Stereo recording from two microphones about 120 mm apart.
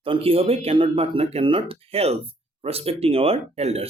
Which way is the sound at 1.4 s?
50° right (ahead or behind).